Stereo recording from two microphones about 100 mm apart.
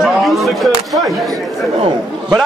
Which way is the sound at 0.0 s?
Centre (ahead or behind).